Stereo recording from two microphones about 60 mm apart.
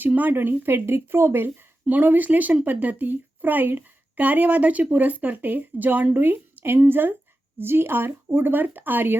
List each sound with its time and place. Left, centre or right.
0.0 s speech: right
1.9 s a woman's voice: right